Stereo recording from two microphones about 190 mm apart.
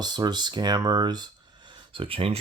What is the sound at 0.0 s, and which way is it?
Speech, 20° right (ahead or behind).